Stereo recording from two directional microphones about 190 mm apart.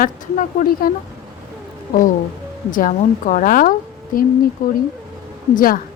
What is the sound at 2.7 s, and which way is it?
A woman's voice, 45° left (ahead or behind).